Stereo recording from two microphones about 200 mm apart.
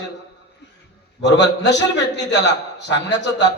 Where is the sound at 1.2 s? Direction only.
60° left (ahead or behind).